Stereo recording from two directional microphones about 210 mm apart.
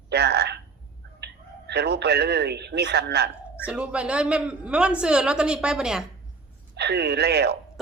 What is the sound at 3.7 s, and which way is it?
A man's voice, 5° right (ahead or behind).